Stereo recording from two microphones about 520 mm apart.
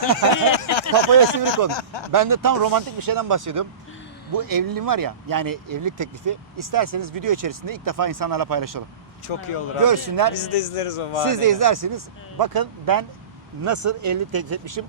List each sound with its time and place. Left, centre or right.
0.5 s a sound: left
1.7 s speech: left
2.1 s speech: right
9.2 s a man's voice: left
9.8 s speech: right
10.3 s a man's voice: left
11.3 s speech: right